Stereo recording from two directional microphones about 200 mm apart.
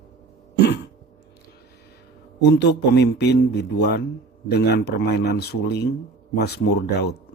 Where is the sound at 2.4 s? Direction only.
55° left (ahead or behind).